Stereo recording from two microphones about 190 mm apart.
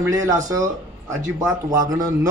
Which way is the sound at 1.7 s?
20° right (ahead or behind).